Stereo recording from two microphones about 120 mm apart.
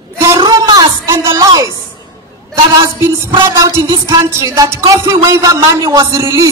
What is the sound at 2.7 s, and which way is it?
Speech, 25° right (ahead or behind).